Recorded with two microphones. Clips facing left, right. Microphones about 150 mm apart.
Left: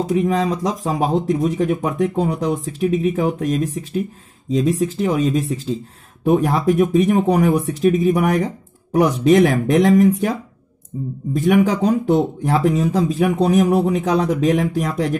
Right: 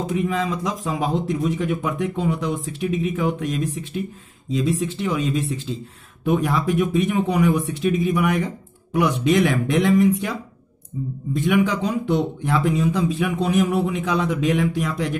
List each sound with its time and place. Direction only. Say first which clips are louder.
0.0 s speech: left 5 dB; 35° left (ahead or behind)
11.3 s speech: left 4 dB; 40° left (ahead or behind)